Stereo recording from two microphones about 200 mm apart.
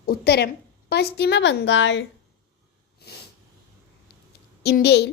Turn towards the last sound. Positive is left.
turn(degrees=55)  # may be behind; listen again after turning